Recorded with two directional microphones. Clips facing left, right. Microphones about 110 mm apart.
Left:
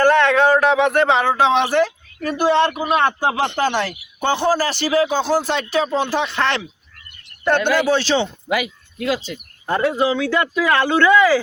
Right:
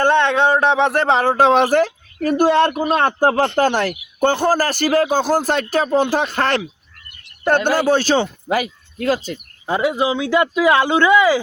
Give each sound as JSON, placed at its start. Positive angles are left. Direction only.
{"t": 0.0, "sound": "speech", "side_deg": -25}
{"t": 9.6, "sound": "speech", "side_deg": -10}